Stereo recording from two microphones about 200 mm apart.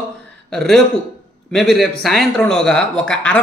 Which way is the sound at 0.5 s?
Centre (ahead or behind).